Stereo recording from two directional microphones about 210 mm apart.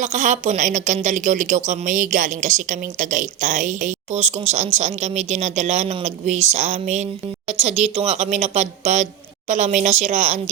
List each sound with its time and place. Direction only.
0.0 s speech: 35° right (ahead or behind)